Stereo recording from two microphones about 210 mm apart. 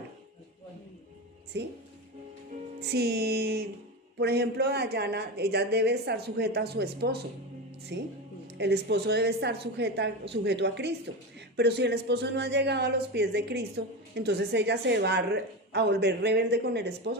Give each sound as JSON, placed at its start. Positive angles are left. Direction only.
{"t": 1.5, "sound": "speech", "side_deg": -55}
{"t": 2.8, "sound": "speech", "side_deg": -50}